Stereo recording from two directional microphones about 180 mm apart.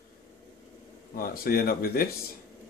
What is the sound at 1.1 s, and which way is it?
Speech, 55° left (ahead or behind).